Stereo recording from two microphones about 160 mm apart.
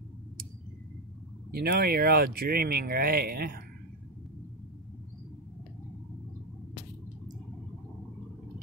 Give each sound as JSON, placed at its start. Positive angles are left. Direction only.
{"t": 1.5, "sound": "speech", "side_deg": -75}